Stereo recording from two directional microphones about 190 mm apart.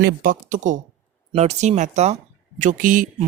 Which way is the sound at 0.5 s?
40° right (ahead or behind).